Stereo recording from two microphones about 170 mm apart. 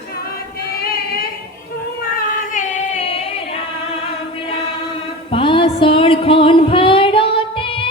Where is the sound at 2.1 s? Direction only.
50° left (ahead or behind).